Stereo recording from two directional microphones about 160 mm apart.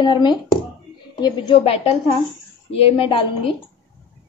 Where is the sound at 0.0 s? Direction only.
30° left (ahead or behind).